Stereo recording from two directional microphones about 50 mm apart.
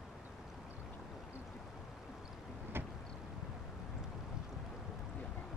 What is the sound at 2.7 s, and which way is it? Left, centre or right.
Vehicle, right.